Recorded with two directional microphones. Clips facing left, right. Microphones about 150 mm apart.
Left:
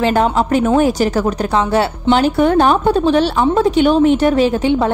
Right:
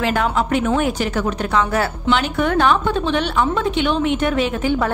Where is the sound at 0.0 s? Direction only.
35° left (ahead or behind).